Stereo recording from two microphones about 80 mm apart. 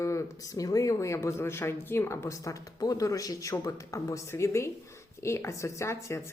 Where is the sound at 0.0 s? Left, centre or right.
Left.